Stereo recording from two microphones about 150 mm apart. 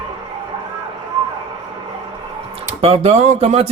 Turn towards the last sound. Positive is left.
turn(degrees=-45)  # may be behind; listen again after turning